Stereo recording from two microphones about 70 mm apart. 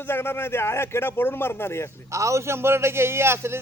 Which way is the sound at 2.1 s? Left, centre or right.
Right.